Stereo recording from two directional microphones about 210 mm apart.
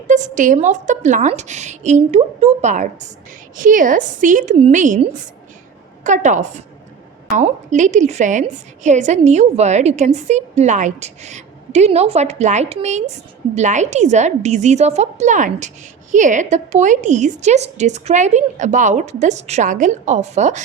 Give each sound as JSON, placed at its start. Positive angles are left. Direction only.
{"t": 0.1, "sound": "a woman's voice", "side_deg": -35}